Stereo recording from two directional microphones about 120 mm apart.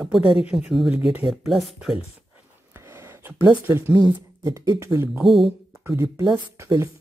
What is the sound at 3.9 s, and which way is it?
Speech, 30° right (ahead or behind).